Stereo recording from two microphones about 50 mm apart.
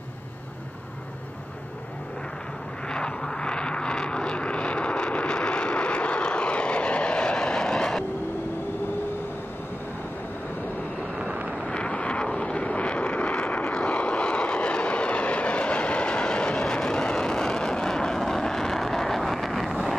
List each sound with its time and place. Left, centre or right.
2.9 s vehicle: centre
11.1 s vehicle: right
11.6 s vehicle: left; by 20.0 s centre